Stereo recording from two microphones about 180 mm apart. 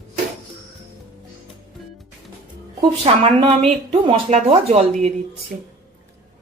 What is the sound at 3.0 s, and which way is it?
Speech, 30° right (ahead or behind).